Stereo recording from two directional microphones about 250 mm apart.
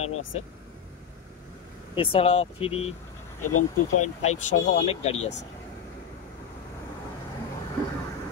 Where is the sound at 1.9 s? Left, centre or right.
Left.